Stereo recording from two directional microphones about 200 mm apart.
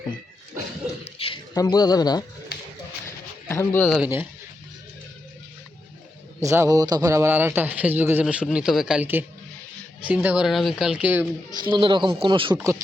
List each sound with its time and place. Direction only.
1.0 s a sound: 30° left (ahead or behind)
1.5 s speech: 20° left (ahead or behind)
2.5 s a sound: 50° left (ahead or behind)
3.5 s speech: 10° left (ahead or behind)
4.0 s speech: 10° right (ahead or behind)
6.4 s speech: 15° right (ahead or behind)
11.5 s speech: 25° right (ahead or behind)